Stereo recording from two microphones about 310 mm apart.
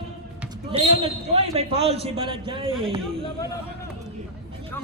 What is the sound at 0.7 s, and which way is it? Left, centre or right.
A man's voice, centre.